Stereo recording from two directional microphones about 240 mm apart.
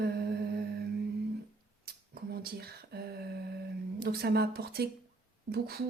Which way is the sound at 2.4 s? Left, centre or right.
Right.